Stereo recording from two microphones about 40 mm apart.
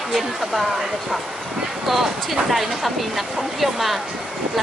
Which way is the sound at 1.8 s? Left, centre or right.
Centre.